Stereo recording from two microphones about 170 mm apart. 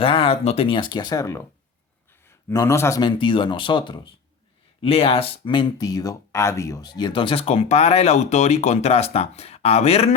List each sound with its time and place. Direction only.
0.0 s a man's voice: 30° left (ahead or behind); by 3.0 s 15° left (ahead or behind)
3.0 s speech: 25° left (ahead or behind)